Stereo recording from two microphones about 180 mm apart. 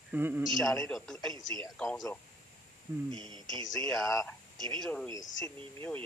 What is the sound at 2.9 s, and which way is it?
Speech, 10° right (ahead or behind).